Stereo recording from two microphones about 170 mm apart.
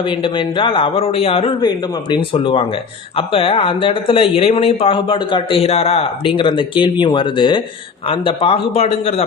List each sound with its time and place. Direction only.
0.0 s speech: 30° left (ahead or behind)